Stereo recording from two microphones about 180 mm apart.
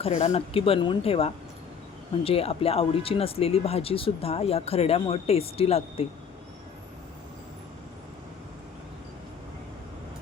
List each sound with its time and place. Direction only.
0.0 s speech: 40° left (ahead or behind)